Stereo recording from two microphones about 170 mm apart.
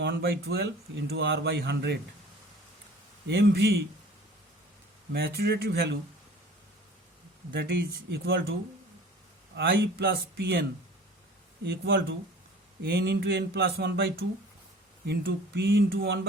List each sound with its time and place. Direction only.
0.0 s speech: 70° right (ahead or behind)
3.2 s speech: 75° right (ahead or behind)
5.1 s speech: 65° right (ahead or behind)
7.5 s speech: 85° right; by 8.5 s 70° right (ahead or behind)
9.6 s speech: 85° right; by 10.7 s 70° right (ahead or behind)
11.6 s speech: 90° right
12.8 s speech: 75° right (ahead or behind)